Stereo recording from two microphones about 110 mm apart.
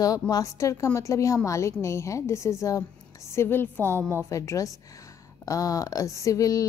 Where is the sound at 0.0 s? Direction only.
35° left (ahead or behind).